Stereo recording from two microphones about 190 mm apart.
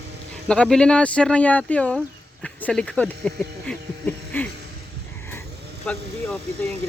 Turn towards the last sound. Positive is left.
turn(degrees=5)  # may be behind; listen again after turning